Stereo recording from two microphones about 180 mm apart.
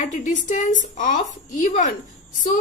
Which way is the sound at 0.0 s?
45° left (ahead or behind).